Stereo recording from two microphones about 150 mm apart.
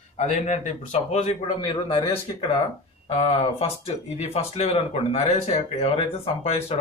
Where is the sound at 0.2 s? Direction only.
50° left (ahead or behind).